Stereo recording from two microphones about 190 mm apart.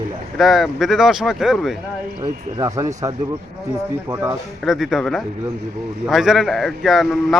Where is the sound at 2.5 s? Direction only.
20° right (ahead or behind).